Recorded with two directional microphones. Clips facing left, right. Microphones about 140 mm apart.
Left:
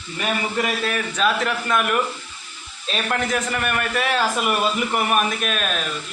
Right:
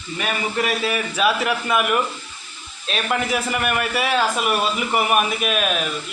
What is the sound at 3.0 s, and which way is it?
Speech, 10° right (ahead or behind).